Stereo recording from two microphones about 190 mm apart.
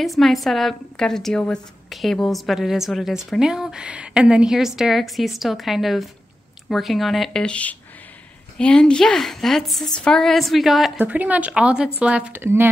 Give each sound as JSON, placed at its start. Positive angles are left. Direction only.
{"t": 0.0, "sound": "a woman's voice", "side_deg": 0}